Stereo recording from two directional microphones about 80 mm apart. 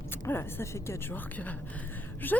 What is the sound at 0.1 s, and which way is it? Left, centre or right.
Speech, left.